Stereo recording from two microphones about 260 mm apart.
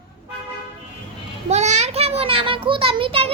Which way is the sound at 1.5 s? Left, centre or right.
Right.